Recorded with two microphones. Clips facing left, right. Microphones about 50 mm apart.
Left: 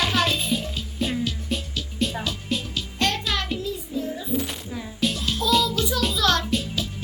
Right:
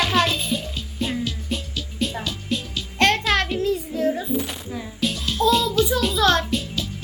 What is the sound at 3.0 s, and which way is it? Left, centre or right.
Music, right.